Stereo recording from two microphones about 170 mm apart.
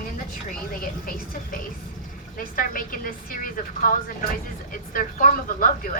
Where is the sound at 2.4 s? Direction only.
55° left (ahead or behind).